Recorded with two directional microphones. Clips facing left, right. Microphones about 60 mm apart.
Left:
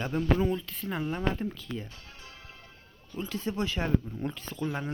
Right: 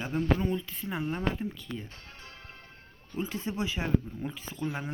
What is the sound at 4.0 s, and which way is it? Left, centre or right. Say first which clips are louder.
Speech: left 2 dB; centre.